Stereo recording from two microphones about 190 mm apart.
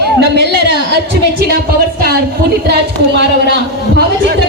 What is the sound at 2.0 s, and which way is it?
A woman's voice, 55° right (ahead or behind).